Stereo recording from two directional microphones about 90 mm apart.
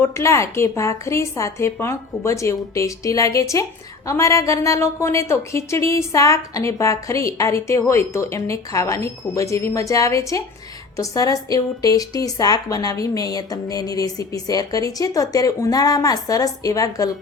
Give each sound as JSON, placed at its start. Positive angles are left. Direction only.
{"t": 0.0, "sound": "a woman's voice", "side_deg": 35}